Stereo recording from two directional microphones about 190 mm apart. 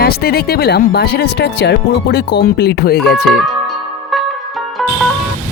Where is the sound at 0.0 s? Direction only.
55° left (ahead or behind).